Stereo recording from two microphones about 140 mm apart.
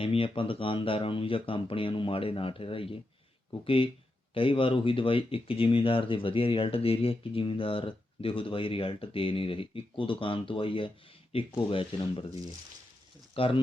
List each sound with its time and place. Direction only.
0.0 s speech: 40° left (ahead or behind)
13.3 s speech: 40° left (ahead or behind)